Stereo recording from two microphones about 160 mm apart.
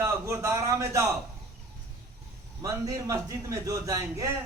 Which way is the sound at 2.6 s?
20° right (ahead or behind).